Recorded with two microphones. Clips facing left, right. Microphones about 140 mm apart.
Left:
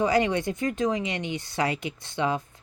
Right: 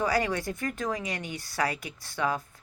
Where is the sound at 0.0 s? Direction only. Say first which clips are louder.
Left 4 dB; 20° left (ahead or behind).